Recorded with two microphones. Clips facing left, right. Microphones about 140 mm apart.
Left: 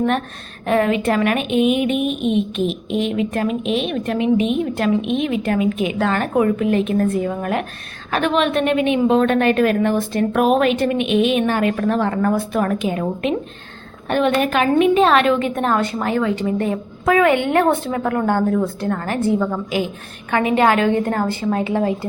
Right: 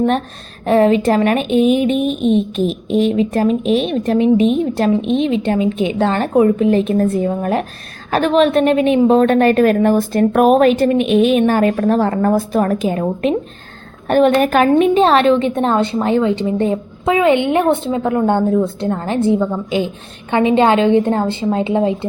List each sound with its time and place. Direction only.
0.6 s speech: 30° right (ahead or behind)
14.9 s a woman's voice: 30° right (ahead or behind)